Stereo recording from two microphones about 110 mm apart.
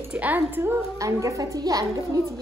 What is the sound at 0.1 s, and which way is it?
A woman's voice, 15° right (ahead or behind).